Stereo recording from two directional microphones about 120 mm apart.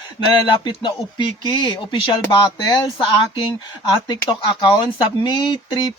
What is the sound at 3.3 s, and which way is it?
Speech, 45° left (ahead or behind).